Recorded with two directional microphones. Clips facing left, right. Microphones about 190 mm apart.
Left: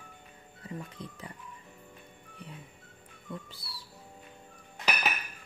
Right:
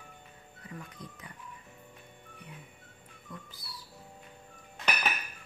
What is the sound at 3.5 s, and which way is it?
Music, 30° left (ahead or behind).